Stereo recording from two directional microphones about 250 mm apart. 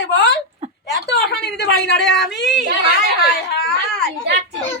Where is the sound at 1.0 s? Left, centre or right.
Left.